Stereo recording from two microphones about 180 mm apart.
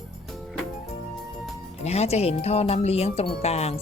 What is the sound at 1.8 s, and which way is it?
Speech, 35° left (ahead or behind).